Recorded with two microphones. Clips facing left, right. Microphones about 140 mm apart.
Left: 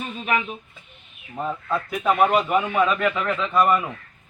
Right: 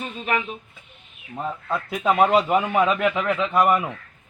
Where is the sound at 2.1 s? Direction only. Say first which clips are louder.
Right 2 dB; 20° right (ahead or behind).